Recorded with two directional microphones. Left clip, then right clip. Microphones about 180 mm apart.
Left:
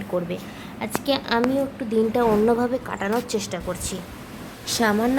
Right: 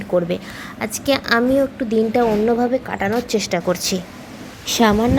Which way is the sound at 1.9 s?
10° right (ahead or behind).